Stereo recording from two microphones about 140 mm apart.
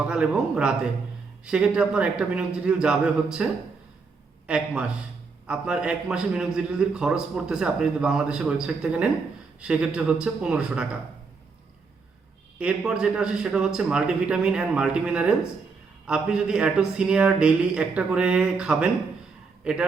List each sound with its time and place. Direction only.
0.1 s a man's voice: 5° right (ahead or behind)
12.5 s a man's voice: 5° right (ahead or behind)